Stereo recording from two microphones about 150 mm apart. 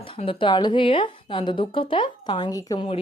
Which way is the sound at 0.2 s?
35° left (ahead or behind).